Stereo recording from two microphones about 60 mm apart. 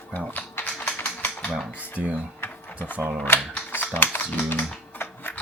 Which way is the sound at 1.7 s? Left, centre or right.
Left.